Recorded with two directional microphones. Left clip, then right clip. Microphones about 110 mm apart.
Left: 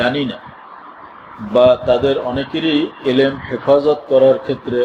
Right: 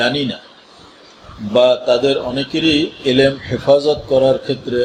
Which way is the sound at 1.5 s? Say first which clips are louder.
Left 1 dB; 10° right (ahead or behind).